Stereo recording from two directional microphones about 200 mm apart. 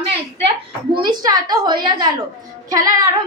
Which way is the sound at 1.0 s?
20° right (ahead or behind).